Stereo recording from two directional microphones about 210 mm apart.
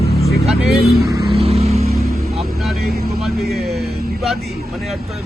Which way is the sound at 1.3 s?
30° right (ahead or behind).